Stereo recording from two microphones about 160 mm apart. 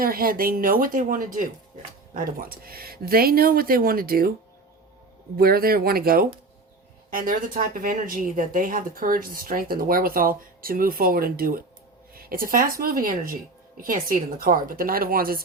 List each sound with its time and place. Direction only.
0.0 s speech: 65° right (ahead or behind)
5.4 s speech: 70° right (ahead or behind)